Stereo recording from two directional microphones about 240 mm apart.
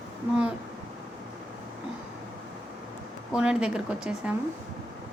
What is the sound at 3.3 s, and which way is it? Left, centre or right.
Speech, centre.